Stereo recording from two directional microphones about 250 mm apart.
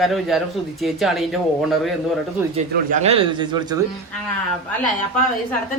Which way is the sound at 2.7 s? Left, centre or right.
Right.